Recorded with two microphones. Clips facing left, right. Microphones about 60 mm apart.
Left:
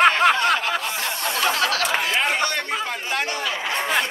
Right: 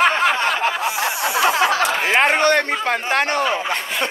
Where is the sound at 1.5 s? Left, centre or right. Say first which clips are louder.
Right 3 dB; right.